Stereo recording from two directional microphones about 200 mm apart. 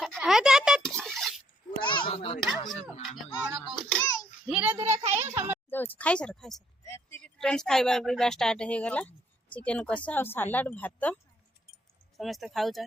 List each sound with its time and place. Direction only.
0.0 s a sound: centre (ahead or behind)
1.8 s children playing: 25° left (ahead or behind)
3.5 s a child's voice: centre (ahead or behind)
5.6 s speech: 10° left (ahead or behind)